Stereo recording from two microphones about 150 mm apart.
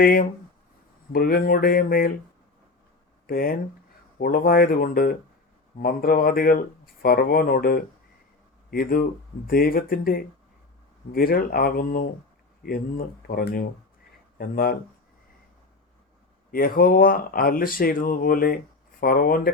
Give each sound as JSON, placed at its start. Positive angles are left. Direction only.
{"t": 0.0, "sound": "speech", "side_deg": 70}
{"t": 1.1, "sound": "speech", "side_deg": 80}
{"t": 3.2, "sound": "speech", "side_deg": 80}
{"t": 16.5, "sound": "speech", "side_deg": 75}